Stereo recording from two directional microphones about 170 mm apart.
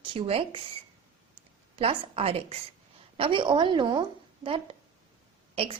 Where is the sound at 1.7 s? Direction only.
35° right (ahead or behind).